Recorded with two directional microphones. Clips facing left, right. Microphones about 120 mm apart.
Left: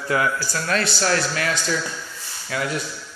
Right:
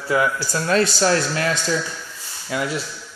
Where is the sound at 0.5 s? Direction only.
30° right (ahead or behind).